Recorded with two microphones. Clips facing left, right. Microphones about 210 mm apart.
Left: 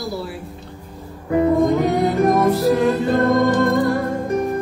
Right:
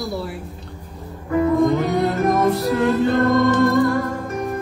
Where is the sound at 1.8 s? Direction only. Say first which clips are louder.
Left 2 dB; centre (ahead or behind).